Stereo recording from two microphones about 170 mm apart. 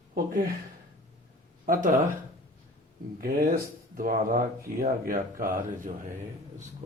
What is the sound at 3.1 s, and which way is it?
Speech, 60° right (ahead or behind).